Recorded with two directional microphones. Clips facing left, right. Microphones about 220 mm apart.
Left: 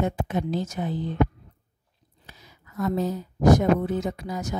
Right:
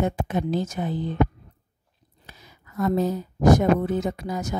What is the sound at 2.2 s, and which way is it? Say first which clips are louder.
Speech: right 1 dB; 50° right (ahead or behind).